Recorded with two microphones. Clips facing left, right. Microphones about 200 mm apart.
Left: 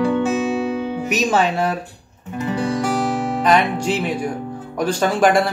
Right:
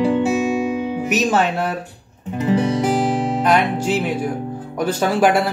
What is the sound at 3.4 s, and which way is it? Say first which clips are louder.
Speech: left 2 dB; 5° right (ahead or behind).